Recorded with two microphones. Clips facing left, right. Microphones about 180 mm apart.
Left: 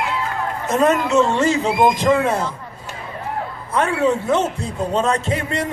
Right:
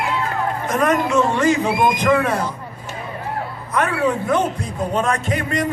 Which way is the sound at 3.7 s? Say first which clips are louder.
Left 2 dB; 25° left (ahead or behind).